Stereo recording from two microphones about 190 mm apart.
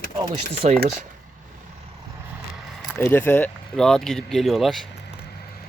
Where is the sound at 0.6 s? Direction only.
40° right (ahead or behind).